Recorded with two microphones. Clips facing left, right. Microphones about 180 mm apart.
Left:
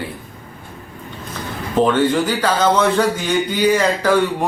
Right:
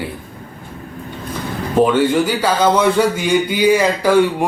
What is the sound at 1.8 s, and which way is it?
Speech, 10° right (ahead or behind).